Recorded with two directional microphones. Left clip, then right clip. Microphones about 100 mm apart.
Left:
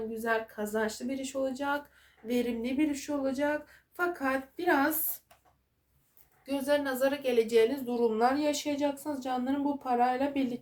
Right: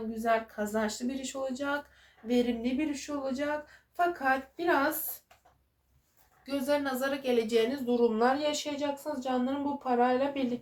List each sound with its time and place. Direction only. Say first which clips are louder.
0.1 s a woman's voice: right 4 dB; 35° left (ahead or behind); by 4.9 s 60° left (ahead or behind)
6.4 s a woman's voice: left 1 dB; 35° left (ahead or behind); by 10.5 s 50° left (ahead or behind)